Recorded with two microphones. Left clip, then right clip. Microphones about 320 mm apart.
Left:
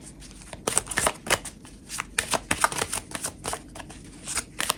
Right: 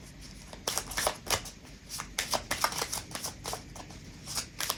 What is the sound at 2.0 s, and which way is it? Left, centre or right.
Shuffling cards, left.